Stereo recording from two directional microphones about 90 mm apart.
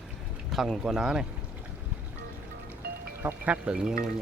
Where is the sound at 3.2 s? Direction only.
15° right (ahead or behind).